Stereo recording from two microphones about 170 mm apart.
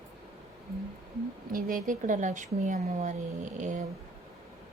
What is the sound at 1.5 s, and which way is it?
Speech, 55° right (ahead or behind).